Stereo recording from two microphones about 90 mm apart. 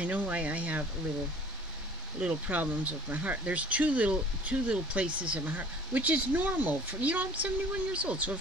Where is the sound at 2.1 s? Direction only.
15° right (ahead or behind).